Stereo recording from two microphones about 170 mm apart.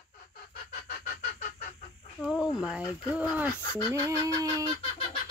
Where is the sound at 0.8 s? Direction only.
55° left (ahead or behind).